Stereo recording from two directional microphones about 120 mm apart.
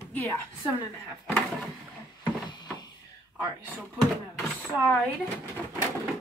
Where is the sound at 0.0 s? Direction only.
20° left (ahead or behind).